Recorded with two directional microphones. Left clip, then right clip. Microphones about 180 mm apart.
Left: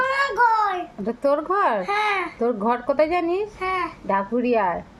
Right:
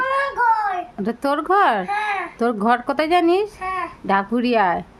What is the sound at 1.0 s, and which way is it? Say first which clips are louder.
Speech: right 1 dB; 25° right (ahead or behind).